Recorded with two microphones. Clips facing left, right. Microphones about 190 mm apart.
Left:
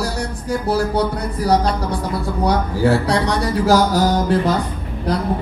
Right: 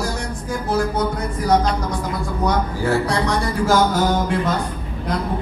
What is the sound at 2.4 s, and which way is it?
Speech, 35° left (ahead or behind).